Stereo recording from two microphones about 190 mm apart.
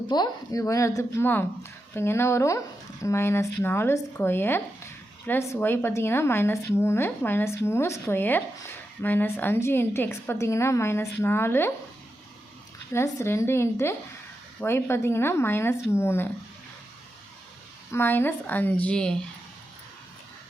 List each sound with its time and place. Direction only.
0.1 s speech: 20° left (ahead or behind)
12.9 s speech: 15° left (ahead or behind)
17.9 s speech: 10° left (ahead or behind)